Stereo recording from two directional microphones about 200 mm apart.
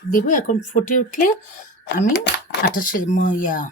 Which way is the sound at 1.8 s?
55° left (ahead or behind).